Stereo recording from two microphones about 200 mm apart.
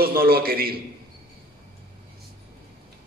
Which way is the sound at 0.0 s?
50° right (ahead or behind).